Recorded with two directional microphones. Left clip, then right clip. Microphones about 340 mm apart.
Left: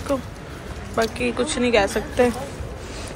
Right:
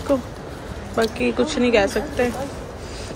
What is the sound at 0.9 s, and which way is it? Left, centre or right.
Speech, centre.